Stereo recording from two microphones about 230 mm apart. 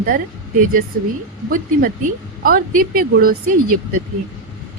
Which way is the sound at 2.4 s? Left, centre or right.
Right.